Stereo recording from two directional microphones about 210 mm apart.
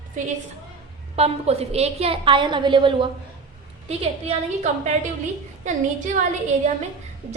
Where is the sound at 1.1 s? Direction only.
30° right (ahead or behind).